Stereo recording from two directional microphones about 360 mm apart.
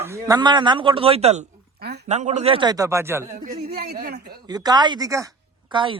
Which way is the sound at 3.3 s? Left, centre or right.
Right.